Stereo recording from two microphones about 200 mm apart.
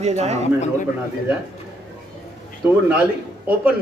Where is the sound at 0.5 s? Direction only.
35° left (ahead or behind).